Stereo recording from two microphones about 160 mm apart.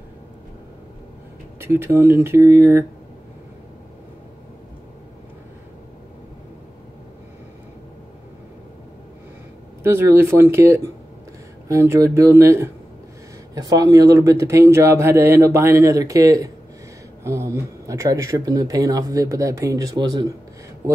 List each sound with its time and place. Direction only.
1.6 s speech: 15° right (ahead or behind)
9.8 s speech: 15° right (ahead or behind)